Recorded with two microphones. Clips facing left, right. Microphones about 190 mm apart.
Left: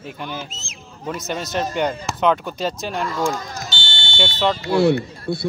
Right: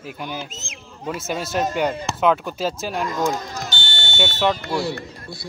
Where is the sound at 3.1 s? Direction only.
20° right (ahead or behind).